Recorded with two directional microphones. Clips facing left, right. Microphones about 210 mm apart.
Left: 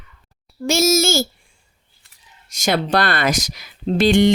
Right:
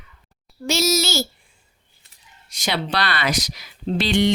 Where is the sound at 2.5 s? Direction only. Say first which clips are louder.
Left 6 dB; 45° left (ahead or behind).